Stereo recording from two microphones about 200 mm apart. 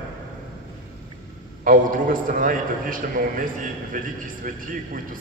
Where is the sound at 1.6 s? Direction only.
45° right (ahead or behind).